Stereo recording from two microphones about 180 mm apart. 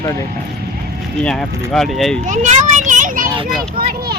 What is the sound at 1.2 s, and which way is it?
Speech, 5° left (ahead or behind).